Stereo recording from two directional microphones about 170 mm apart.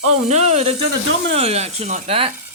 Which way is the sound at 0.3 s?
40° right (ahead or behind).